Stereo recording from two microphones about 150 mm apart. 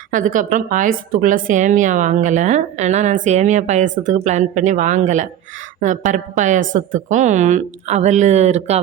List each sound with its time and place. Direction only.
0.1 s a woman's voice: 60° right (ahead or behind); by 8.8 s 45° right (ahead or behind)